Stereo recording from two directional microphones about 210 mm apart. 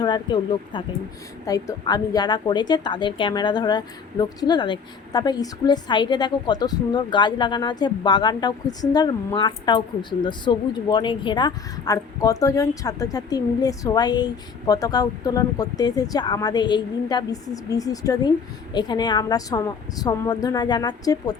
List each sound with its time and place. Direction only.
0.0 s a woman's voice: 20° left (ahead or behind)